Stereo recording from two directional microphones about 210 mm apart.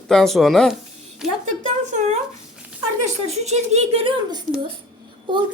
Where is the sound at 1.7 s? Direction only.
35° right (ahead or behind).